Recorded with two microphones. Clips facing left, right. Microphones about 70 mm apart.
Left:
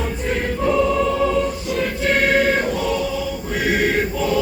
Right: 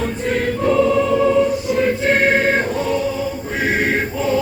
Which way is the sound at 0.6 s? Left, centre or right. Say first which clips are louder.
Right 2 dB; centre.